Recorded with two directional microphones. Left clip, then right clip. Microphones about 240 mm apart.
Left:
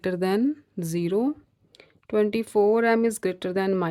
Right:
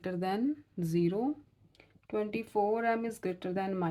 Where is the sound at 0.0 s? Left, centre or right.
Left.